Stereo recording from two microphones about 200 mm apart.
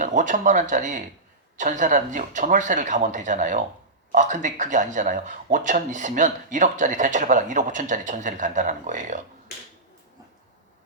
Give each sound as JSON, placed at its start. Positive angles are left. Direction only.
{"t": 0.0, "sound": "speech", "side_deg": -40}